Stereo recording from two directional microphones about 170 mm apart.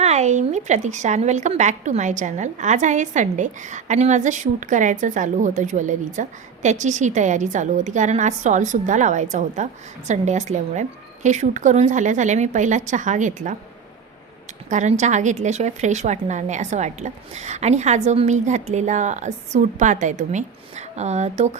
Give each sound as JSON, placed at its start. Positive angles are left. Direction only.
{"t": 0.0, "sound": "a woman's voice", "side_deg": -40}
{"t": 14.7, "sound": "a woman's voice", "side_deg": -45}